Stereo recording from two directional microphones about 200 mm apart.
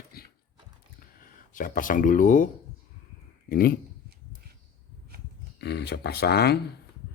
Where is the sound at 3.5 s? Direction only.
45° left (ahead or behind).